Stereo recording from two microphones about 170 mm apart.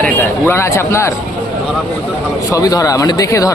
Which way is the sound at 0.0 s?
15° left (ahead or behind).